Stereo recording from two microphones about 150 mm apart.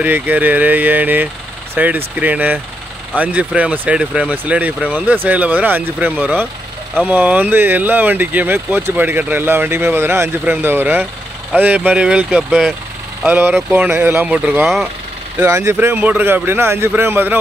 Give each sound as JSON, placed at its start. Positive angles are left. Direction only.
{"t": 0.0, "sound": "speech", "side_deg": -10}
{"t": 13.3, "sound": "speech", "side_deg": -15}
{"t": 15.3, "sound": "speech", "side_deg": -20}